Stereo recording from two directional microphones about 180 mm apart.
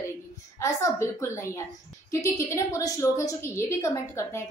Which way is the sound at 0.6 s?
15° left (ahead or behind).